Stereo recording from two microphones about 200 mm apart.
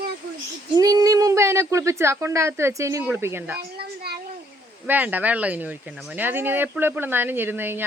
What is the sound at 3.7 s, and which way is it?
Speech, 55° right (ahead or behind).